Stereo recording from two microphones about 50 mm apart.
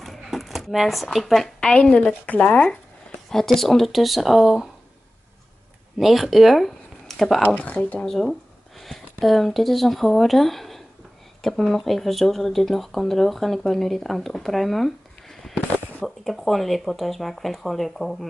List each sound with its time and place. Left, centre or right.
0.0 s a sound: centre
1.1 s speech: centre
1.6 s a woman's voice: left
3.3 s speech: centre
5.9 s speech: centre
7.4 s speech: left
8.2 s speech: centre